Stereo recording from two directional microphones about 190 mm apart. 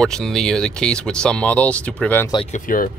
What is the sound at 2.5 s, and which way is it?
Speech, 45° left (ahead or behind).